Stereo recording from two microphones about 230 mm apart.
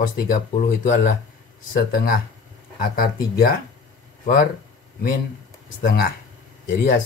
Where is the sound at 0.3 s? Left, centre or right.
Left.